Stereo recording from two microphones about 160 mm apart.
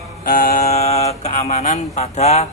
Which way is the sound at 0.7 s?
40° left (ahead or behind).